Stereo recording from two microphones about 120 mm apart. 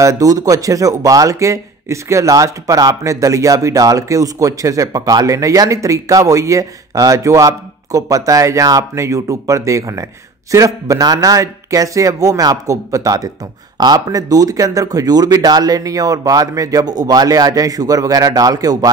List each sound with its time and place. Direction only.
0.0 s speech: 30° right (ahead or behind)